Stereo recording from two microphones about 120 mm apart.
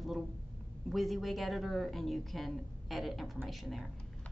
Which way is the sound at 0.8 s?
Centre (ahead or behind).